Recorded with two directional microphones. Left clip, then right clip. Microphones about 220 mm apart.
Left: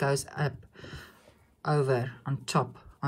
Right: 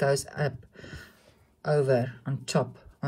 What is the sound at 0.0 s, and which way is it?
Speech, 15° left (ahead or behind).